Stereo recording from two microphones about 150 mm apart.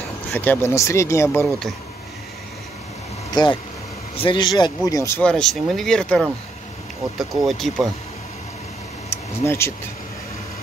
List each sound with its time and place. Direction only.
0.3 s speech: 10° left (ahead or behind)
3.4 s speech: 30° left (ahead or behind)
5.2 s speech: 5° left (ahead or behind)
9.1 s speech: 15° left (ahead or behind)